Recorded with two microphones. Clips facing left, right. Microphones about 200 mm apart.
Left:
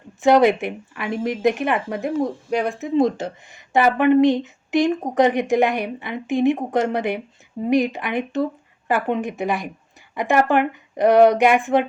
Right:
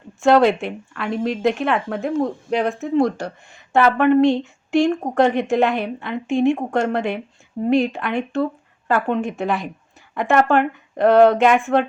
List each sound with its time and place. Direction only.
0.2 s speech: 15° left (ahead or behind)
2.8 s speech: 20° left (ahead or behind)
7.6 s speech: 15° right (ahead or behind)
7.9 s speech: 15° left (ahead or behind)